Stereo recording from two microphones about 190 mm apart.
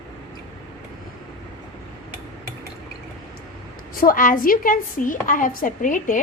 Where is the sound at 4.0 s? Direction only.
50° left (ahead or behind).